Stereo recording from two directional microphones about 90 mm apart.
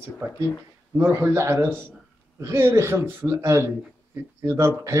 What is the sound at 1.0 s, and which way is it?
A man's voice, 30° right (ahead or behind).